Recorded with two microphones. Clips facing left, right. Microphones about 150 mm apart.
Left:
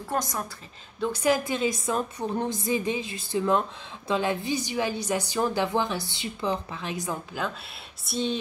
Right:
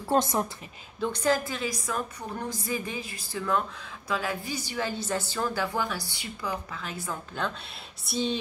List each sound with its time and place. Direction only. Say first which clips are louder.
0.1 s a woman's voice: right 5 dB; 25° right (ahead or behind)
1.0 s a woman's voice: left 2 dB; 10° left (ahead or behind)
7.4 s speech: left 1 dB; 5° left (ahead or behind)